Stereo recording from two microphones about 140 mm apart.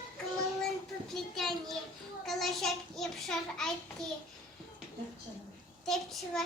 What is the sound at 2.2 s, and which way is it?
A child's voice, centre (ahead or behind).